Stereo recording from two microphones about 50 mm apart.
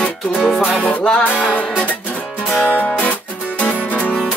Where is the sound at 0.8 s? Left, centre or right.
Left.